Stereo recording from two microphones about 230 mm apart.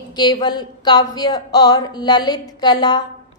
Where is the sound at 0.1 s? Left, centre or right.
Centre.